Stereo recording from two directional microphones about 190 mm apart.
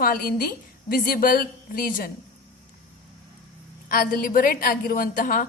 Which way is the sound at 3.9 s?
50° left (ahead or behind).